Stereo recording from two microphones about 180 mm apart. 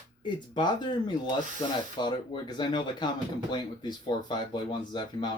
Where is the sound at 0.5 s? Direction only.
25° left (ahead or behind).